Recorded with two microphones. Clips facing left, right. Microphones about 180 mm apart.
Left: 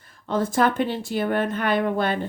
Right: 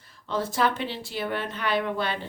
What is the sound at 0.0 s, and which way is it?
Speech, 50° left (ahead or behind).